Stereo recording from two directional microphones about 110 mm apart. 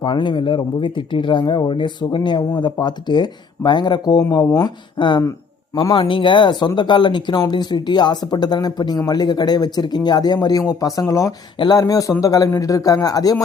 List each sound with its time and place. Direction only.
0.0 s speech: 45° left (ahead or behind); by 11.3 s 30° left (ahead or behind)
11.5 s speech: 45° left (ahead or behind)
11.8 s speech: 30° left (ahead or behind)